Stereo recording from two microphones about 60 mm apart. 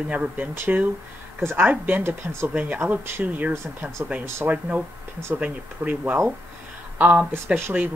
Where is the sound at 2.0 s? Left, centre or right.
Right.